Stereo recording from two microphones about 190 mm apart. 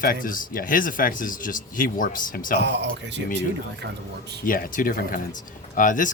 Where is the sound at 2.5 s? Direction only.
65° right (ahead or behind).